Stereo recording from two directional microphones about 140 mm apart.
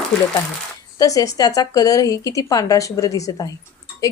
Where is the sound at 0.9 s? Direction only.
25° left (ahead or behind).